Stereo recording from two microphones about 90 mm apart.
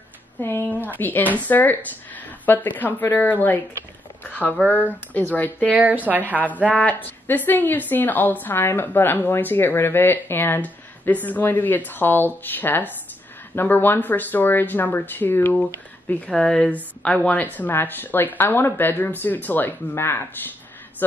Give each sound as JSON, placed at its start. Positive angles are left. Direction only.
{"t": 0.4, "sound": "a woman's voice", "side_deg": 25}
{"t": 4.2, "sound": "a sound", "side_deg": 20}
{"t": 4.6, "sound": "a woman's voice", "side_deg": 20}
{"t": 5.7, "sound": "a woman's voice", "side_deg": -20}
{"t": 6.7, "sound": "a woman's voice", "side_deg": 15}